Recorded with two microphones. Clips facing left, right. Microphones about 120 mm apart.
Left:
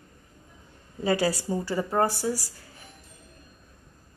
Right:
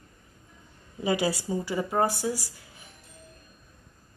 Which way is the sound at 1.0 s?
20° right (ahead or behind).